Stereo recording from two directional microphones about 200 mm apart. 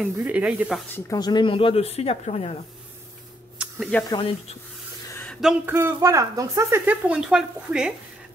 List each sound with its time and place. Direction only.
0.0 s speech: 5° right (ahead or behind)
0.9 s speech: 15° left (ahead or behind)
3.5 s a sound: 5° right (ahead or behind)
4.1 s speech: 25° left (ahead or behind)
5.1 s a woman's voice: 5° left (ahead or behind)